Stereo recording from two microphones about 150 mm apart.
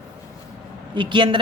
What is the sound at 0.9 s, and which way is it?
Speech, 30° right (ahead or behind).